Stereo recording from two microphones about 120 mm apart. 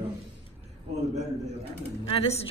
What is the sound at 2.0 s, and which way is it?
Speech, 55° left (ahead or behind).